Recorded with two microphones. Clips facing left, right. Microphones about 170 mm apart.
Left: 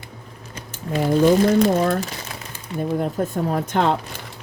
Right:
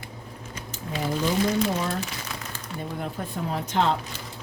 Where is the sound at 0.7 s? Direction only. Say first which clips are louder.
Left 9 dB; 55° left (ahead or behind).